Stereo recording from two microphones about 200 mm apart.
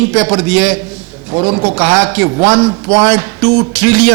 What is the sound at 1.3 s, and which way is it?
Speech, 25° right (ahead or behind).